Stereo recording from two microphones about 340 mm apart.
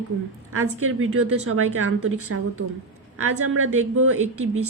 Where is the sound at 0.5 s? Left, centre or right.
Right.